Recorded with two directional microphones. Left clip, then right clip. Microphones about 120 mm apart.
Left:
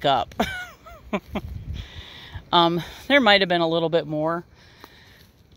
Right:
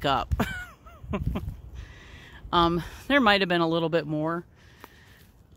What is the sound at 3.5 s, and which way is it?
Speech, 35° right (ahead or behind).